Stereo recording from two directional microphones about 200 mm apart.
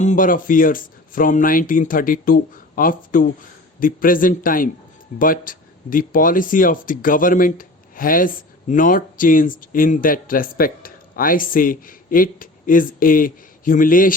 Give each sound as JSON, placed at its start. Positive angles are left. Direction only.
{"t": 0.0, "sound": "speech", "side_deg": 40}